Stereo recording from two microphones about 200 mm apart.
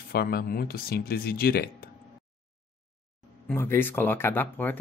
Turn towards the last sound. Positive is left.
turn(degrees=10)  # may be behind; listen again after turning